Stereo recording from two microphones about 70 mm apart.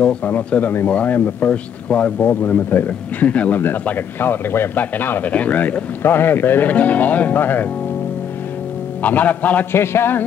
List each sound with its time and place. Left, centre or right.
0.0 s a man's voice: centre
9.0 s a man's voice: left
9.8 s a sound: left